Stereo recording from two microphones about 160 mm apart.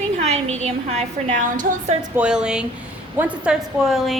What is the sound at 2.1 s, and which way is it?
A woman's voice, 5° right (ahead or behind).